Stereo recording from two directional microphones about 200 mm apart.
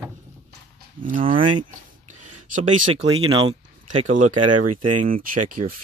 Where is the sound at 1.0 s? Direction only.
45° right (ahead or behind); by 3.5 s 25° right (ahead or behind).